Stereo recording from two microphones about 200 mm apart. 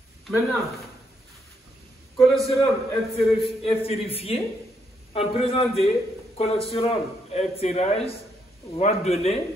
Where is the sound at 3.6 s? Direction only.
30° left (ahead or behind).